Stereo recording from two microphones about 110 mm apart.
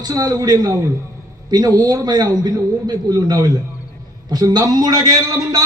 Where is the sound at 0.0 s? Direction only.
35° right (ahead or behind).